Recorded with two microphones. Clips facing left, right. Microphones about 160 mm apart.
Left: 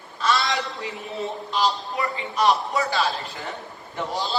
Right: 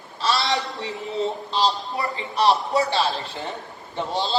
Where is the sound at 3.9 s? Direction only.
25° right (ahead or behind).